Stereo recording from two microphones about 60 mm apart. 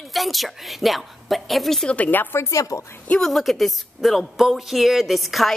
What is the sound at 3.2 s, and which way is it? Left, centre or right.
Speech, centre.